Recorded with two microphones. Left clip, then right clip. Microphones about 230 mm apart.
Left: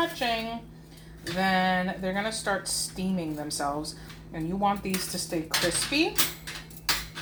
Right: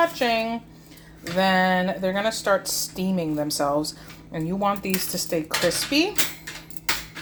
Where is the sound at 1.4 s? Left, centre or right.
Right.